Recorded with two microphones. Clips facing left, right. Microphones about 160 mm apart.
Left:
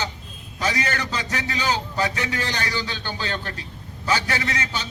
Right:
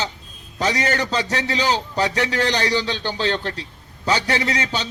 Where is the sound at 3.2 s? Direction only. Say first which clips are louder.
Right 8 dB; 30° right (ahead or behind).